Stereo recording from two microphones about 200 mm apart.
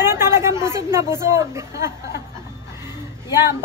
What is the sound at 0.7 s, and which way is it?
A woman's voice, 15° right (ahead or behind).